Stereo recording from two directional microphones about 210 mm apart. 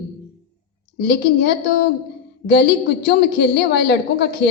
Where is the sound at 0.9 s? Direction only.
50° left (ahead or behind).